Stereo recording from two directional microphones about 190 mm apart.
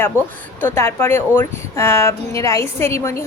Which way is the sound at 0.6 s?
10° left (ahead or behind).